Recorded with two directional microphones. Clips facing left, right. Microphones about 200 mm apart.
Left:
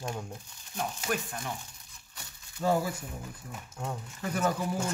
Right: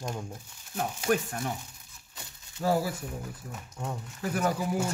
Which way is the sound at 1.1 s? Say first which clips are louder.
Right 7 dB; 45° right (ahead or behind).